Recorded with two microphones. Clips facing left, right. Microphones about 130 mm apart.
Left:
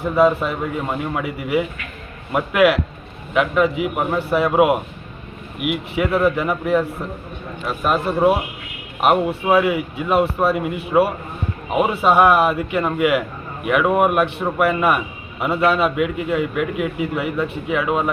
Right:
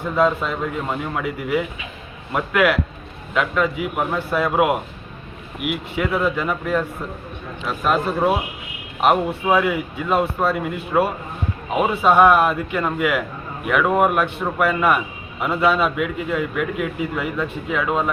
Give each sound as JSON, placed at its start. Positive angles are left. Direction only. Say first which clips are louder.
{"t": 0.0, "sound": "a man's voice", "louder": "left 3 dB", "side_deg": 10}
{"t": 6.0, "sound": "a man's voice", "louder": "left 3 dB", "side_deg": 10}